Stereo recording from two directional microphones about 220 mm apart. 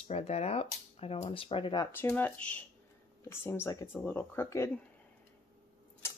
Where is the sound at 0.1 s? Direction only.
30° left (ahead or behind); by 2.6 s 5° left (ahead or behind).